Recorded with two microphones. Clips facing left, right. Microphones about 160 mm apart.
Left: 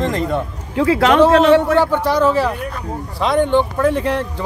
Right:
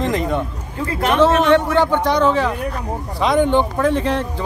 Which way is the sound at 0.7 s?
90° left.